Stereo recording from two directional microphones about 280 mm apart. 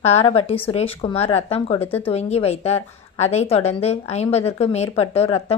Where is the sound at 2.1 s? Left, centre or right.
Left.